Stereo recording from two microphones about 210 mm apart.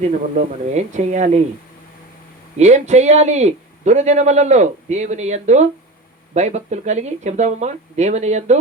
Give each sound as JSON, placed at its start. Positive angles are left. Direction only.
{"t": 0.0, "sound": "a man's voice", "side_deg": -35}
{"t": 2.6, "sound": "a man's voice", "side_deg": -35}